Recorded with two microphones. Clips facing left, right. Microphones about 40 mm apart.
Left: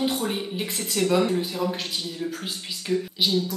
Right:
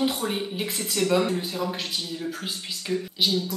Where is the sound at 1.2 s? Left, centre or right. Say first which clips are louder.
Left 2 dB; centre.